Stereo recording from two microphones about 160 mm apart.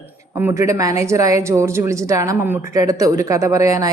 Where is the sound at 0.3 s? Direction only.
15° right (ahead or behind).